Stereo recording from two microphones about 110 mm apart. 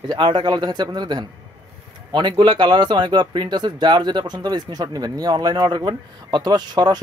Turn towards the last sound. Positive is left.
turn(degrees=-40)  # may be behind; listen again after turning